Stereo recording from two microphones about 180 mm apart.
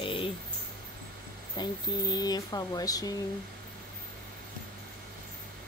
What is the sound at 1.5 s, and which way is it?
Speech, 20° left (ahead or behind).